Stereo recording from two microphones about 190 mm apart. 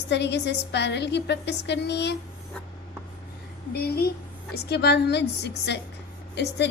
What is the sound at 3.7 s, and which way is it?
A woman's voice, 55° left (ahead or behind).